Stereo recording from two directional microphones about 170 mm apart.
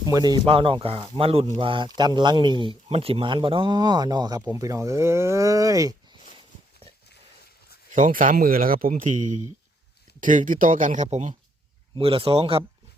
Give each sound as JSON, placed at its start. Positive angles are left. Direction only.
{"t": 0.0, "sound": "speech", "side_deg": -20}
{"t": 0.4, "sound": "speech", "side_deg": -35}
{"t": 7.9, "sound": "speech", "side_deg": -50}
{"t": 11.9, "sound": "speech", "side_deg": -35}